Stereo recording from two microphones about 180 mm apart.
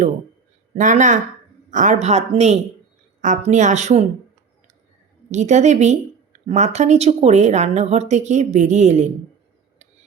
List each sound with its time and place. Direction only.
0.8 s speech: 45° right (ahead or behind)
5.3 s speech: 40° right (ahead or behind)